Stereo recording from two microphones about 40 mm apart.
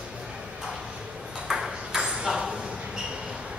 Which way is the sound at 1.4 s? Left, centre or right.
Centre.